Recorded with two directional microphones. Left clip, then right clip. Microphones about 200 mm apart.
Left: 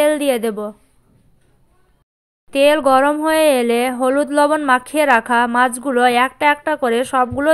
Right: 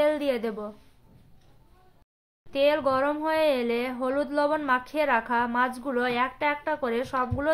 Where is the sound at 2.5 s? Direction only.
40° left (ahead or behind).